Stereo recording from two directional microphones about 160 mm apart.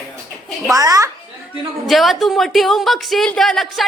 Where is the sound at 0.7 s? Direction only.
20° right (ahead or behind).